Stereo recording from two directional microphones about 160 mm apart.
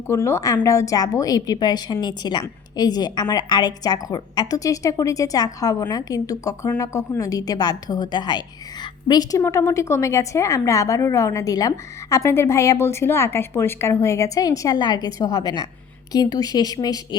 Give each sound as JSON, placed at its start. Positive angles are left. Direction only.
{"t": 0.1, "sound": "a woman's voice", "side_deg": 15}